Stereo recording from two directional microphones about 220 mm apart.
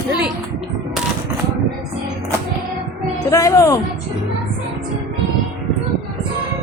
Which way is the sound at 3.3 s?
15° left (ahead or behind).